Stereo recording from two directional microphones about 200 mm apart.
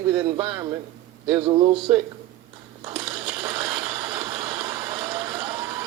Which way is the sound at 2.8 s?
25° right (ahead or behind).